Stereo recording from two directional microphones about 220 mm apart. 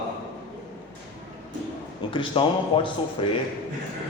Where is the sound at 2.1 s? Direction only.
25° left (ahead or behind).